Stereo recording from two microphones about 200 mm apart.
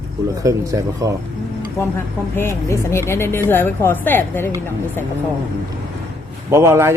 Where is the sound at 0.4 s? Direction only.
15° right (ahead or behind).